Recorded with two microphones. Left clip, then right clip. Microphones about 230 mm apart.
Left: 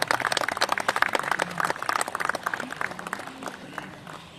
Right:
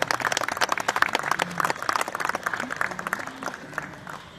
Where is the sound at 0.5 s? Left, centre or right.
Right.